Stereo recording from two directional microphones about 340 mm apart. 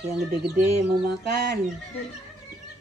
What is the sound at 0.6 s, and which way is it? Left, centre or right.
Bird, right.